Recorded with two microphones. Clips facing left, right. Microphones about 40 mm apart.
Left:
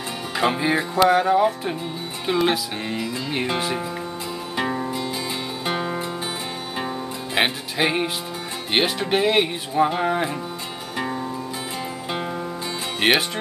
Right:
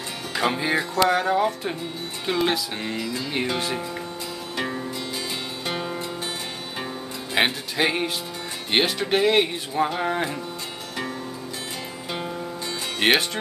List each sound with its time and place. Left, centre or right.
0.4 s speech: centre
4.6 s music: centre
7.3 s speech: centre
13.0 s speech: centre